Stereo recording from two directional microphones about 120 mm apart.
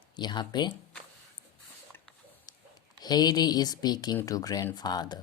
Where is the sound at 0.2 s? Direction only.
40° left (ahead or behind).